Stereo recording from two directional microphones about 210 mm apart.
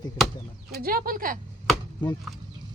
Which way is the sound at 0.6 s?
45° right (ahead or behind).